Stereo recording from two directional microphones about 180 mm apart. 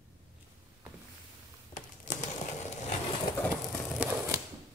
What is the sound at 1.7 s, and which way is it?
Crumpling, 45° left (ahead or behind).